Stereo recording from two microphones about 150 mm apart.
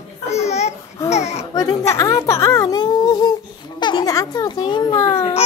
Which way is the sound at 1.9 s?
20° left (ahead or behind).